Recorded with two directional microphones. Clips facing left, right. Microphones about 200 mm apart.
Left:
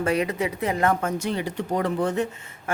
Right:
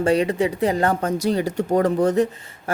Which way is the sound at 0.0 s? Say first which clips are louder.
Right 5 dB; 30° right (ahead or behind).